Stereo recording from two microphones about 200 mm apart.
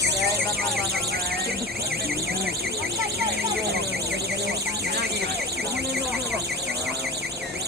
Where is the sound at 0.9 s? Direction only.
50° right (ahead or behind).